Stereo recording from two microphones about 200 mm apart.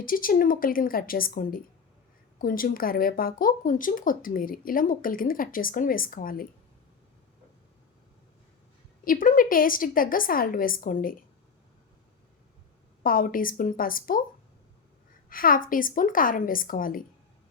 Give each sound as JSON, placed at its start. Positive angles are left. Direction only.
{"t": 0.0, "sound": "speech", "side_deg": 45}
{"t": 9.0, "sound": "speech", "side_deg": 45}
{"t": 13.0, "sound": "speech", "side_deg": 45}
{"t": 15.3, "sound": "speech", "side_deg": 45}